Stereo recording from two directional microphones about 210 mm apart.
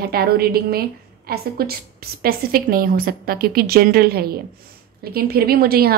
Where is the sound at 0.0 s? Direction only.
45° right (ahead or behind).